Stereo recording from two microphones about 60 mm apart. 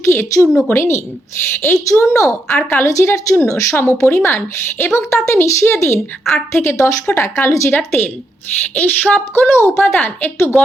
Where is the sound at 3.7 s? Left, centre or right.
Left.